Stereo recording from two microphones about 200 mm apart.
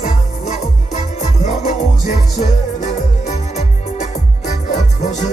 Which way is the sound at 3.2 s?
35° left (ahead or behind).